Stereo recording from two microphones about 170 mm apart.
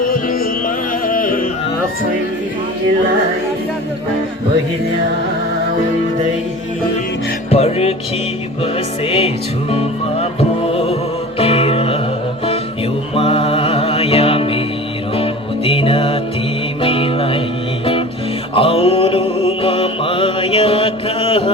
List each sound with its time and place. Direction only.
0.0 s music: 55° left (ahead or behind)
7.5 s music: 35° left (ahead or behind)
13.1 s music: 30° left (ahead or behind)
18.5 s mantra: 35° left (ahead or behind)